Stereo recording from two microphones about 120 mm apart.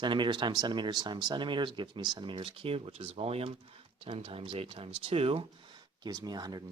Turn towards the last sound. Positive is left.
turn(degrees=-35)  # may be behind; listen again after turning